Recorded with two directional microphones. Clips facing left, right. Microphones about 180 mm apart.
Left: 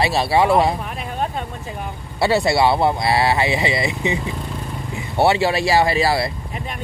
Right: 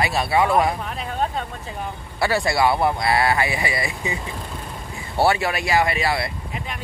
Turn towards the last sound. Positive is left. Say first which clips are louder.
# left 4 dB
turn(degrees=35)  # may be behind; listen again after turning